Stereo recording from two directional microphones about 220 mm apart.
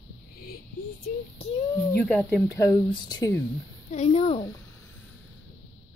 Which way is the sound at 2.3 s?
10° left (ahead or behind).